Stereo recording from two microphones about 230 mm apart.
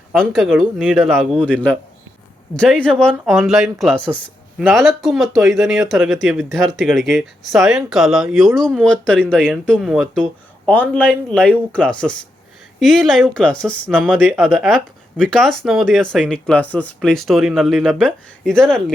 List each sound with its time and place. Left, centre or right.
0.1 s speech: centre